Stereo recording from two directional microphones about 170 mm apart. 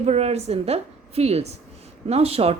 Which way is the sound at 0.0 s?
40° right (ahead or behind).